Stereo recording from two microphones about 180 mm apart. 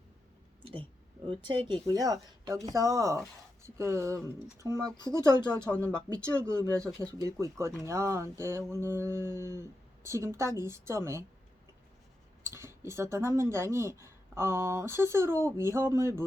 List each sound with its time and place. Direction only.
0.6 s a sound: 25° right (ahead or behind)
1.3 s speech: 25° right (ahead or behind)
6.1 s speech: 5° left (ahead or behind)
6.7 s speech: 15° right (ahead or behind)
12.4 s speech: 15° right (ahead or behind)